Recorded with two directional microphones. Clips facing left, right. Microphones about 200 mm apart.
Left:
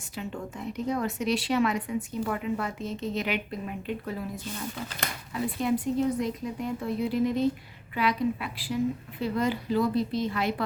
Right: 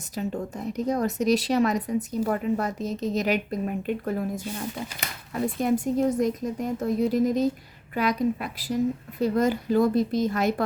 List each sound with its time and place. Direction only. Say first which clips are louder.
0.1 s speech: right 6 dB; 40° right (ahead or behind)
5.3 s a woman's voice: right 4 dB; 45° right (ahead or behind)